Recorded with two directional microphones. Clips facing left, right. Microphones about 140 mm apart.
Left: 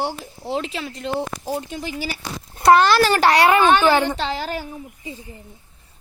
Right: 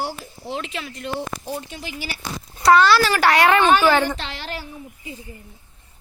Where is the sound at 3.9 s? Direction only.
15° left (ahead or behind).